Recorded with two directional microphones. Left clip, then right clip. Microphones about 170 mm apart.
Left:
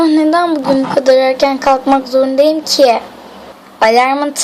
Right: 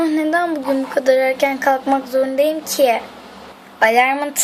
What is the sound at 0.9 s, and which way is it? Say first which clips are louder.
Speech: left 5 dB; 10° left (ahead or behind).